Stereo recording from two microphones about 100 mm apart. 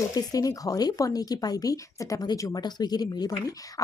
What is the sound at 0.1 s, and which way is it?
Speech, 35° left (ahead or behind).